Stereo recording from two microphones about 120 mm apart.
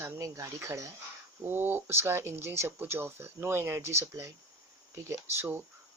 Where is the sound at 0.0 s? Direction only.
25° right (ahead or behind).